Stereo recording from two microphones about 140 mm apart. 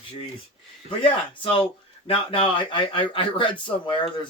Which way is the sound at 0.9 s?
40° left (ahead or behind).